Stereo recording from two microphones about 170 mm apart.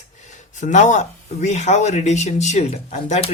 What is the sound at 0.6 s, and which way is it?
Speech, 45° left (ahead or behind).